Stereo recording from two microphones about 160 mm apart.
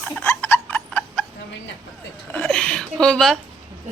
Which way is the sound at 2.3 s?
5° left (ahead or behind).